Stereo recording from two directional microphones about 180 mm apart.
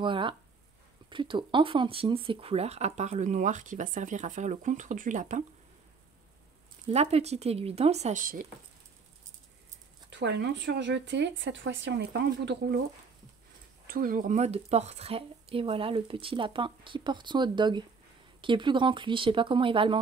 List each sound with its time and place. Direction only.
0.0 s speech: 30° right (ahead or behind); by 5.4 s 45° right (ahead or behind)
6.9 s a woman's voice: 35° right (ahead or behind)
10.0 s speech: 70° right (ahead or behind)
13.8 s a woman's voice: 50° right (ahead or behind); by 20.0 s 30° right (ahead or behind)